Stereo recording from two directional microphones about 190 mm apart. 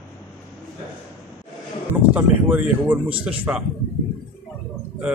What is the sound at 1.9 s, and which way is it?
Speech, 10° right (ahead or behind).